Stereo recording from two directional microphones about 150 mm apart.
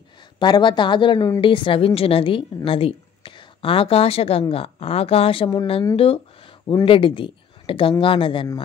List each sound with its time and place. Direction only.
0.4 s a woman's voice: 30° left (ahead or behind)